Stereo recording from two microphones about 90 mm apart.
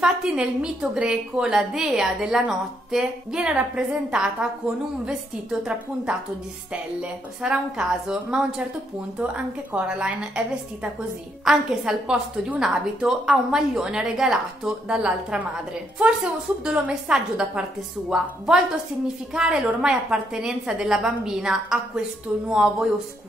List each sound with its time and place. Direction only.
0.0 s a woman's voice: 10° right (ahead or behind)